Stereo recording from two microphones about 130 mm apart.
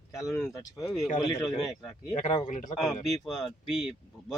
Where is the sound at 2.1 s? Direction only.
65° left (ahead or behind).